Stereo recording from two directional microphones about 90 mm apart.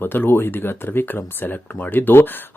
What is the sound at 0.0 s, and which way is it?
Speech, 25° left (ahead or behind).